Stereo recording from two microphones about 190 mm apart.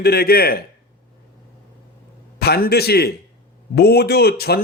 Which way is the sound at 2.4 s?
55° left (ahead or behind).